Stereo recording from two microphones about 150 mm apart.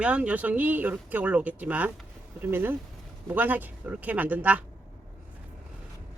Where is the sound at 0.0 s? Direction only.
10° right (ahead or behind).